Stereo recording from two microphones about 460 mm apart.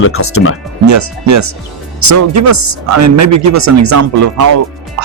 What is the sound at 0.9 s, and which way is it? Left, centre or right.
Speech, right.